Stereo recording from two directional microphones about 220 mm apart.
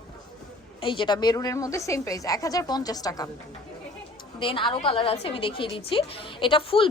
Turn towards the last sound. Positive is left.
turn(degrees=25)  # may be behind; listen again after turning